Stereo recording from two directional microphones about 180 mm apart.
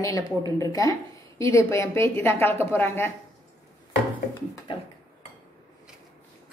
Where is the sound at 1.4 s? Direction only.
15° left (ahead or behind).